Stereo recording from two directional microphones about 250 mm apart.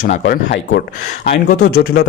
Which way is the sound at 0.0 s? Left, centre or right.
Left.